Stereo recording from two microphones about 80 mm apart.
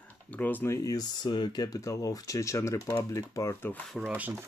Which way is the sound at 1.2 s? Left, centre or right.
Left.